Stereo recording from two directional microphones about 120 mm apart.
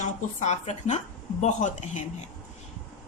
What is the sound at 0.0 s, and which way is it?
A woman's voice, 80° left.